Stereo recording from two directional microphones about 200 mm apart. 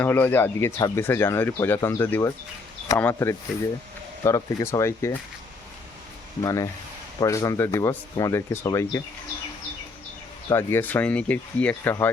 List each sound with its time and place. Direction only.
0.0 s speech: 10° left (ahead or behind)
6.4 s speech: 15° left (ahead or behind)
10.5 s speech: 10° left (ahead or behind)